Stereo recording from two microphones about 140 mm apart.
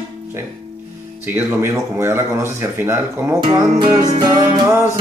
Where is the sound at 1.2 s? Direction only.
15° right (ahead or behind).